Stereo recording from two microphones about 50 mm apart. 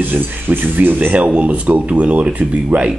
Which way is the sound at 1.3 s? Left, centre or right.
Right.